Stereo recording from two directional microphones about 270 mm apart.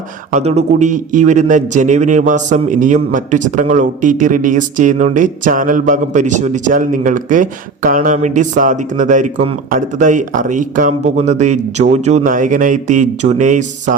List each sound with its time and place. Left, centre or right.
0.3 s a man's voice: right